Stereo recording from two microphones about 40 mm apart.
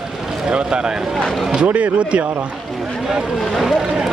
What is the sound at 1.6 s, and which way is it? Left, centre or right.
Speech, right.